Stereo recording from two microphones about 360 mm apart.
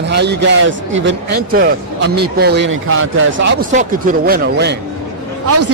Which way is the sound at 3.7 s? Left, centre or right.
Right.